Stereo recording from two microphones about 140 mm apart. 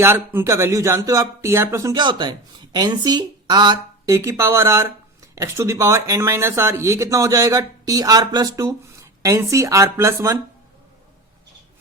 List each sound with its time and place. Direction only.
0.0 s speech: 20° right (ahead or behind)
2.0 s a man's voice: 30° right (ahead or behind)
4.1 s speech: 20° right (ahead or behind)